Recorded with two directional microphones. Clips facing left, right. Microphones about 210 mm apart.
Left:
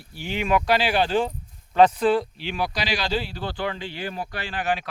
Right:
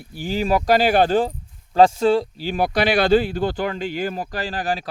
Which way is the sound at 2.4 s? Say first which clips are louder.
Right 7 dB; 45° right (ahead or behind).